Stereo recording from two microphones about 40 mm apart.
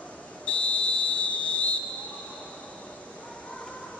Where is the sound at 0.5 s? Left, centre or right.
Left.